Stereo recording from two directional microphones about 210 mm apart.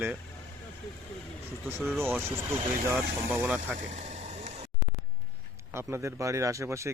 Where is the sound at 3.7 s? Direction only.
35° right (ahead or behind).